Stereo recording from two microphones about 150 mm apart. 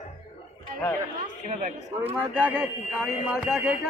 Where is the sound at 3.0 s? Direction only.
5° right (ahead or behind).